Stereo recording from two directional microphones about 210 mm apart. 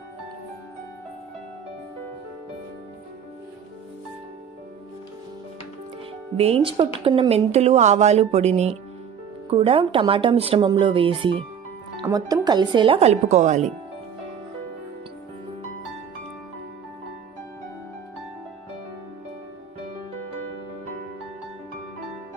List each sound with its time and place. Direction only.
6.3 s a woman's voice: 30° right (ahead or behind)